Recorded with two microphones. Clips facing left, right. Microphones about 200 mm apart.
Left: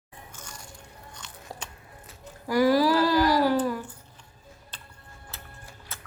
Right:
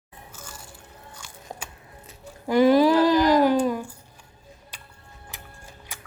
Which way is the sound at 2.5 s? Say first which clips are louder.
Right 4 dB; 20° right (ahead or behind).